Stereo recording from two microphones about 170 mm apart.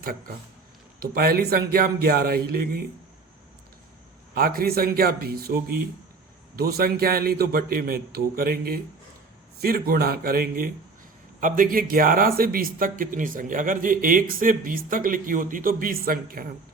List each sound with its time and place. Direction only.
1.1 s speech: 65° right (ahead or behind)
4.4 s speech: 60° right (ahead or behind)
6.6 s speech: 65° right (ahead or behind)